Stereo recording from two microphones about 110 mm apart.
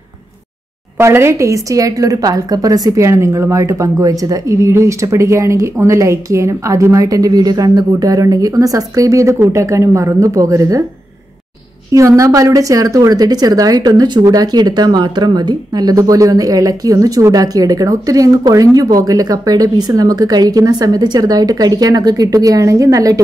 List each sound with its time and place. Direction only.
0.9 s a woman's voice: 25° right (ahead or behind)
11.9 s a woman's voice: 30° right (ahead or behind)